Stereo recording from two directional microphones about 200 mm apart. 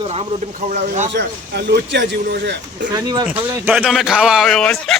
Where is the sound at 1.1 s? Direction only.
55° right (ahead or behind).